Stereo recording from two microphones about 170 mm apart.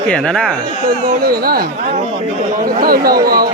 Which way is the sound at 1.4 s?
60° right (ahead or behind).